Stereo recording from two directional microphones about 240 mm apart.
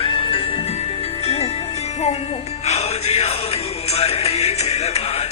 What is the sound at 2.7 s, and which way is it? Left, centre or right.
Music, left.